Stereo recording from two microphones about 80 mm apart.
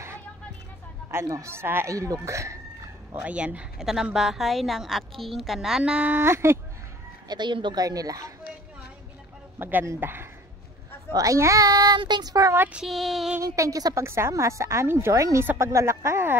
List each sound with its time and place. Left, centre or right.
1.1 s a woman's voice: right
2.0 s a woman's voice: right
3.2 s a woman's voice: centre
7.2 s speech: right
7.8 s a child's voice: right
9.6 s speech: right
11.1 s a child's voice: right
12.5 s speech: centre
12.8 s a woman's voice: centre
13.4 s a child's voice: right
14.0 s a woman's voice: right